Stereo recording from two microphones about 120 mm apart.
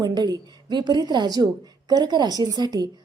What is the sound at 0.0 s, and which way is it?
A woman's voice, 35° right (ahead or behind).